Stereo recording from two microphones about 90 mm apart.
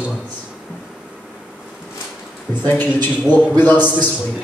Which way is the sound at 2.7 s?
20° left (ahead or behind).